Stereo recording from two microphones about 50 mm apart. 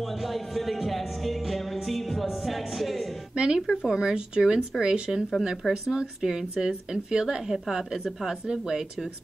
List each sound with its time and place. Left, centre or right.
0.0 s music: centre
3.3 s a sound: centre
3.6 s speech: centre